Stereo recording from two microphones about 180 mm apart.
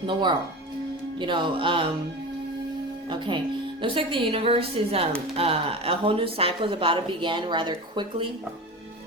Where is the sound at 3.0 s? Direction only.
25° right (ahead or behind).